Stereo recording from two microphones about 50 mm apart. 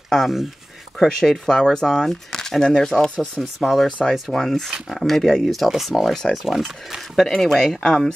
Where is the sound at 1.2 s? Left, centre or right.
Centre.